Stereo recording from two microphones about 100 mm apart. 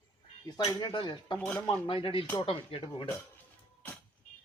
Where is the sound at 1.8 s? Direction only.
60° left (ahead or behind).